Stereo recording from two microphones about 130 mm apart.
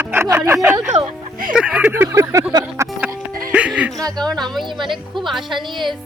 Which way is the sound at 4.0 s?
30° right (ahead or behind).